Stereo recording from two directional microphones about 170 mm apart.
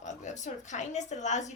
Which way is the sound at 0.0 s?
45° left (ahead or behind).